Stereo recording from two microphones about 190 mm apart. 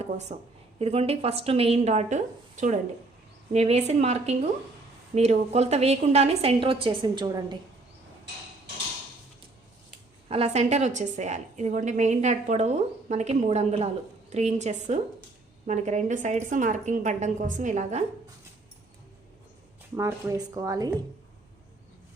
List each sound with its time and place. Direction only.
0.0 s a woman's voice: 35° right (ahead or behind); by 7.6 s 20° right (ahead or behind)
10.2 s a woman's voice: 35° right (ahead or behind)
20.0 s a woman's voice: 15° right (ahead or behind)